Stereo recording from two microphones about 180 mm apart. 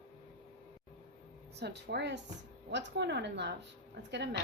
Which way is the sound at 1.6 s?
70° right (ahead or behind).